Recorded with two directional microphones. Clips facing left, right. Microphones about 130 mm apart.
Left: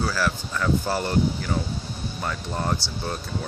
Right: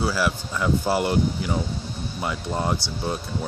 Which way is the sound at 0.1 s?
10° right (ahead or behind).